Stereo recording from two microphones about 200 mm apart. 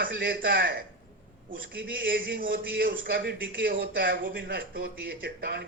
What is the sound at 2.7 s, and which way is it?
A man's voice, 45° right (ahead or behind).